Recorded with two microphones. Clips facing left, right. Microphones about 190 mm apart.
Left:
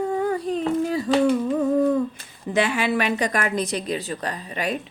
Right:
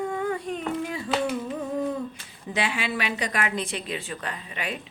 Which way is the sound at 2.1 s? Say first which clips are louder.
Left 7 dB; 45° left (ahead or behind).